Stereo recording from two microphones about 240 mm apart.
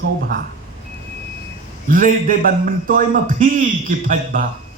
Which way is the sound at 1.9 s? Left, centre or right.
Right.